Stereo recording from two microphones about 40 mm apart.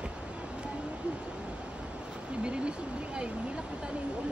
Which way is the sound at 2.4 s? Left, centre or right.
Right.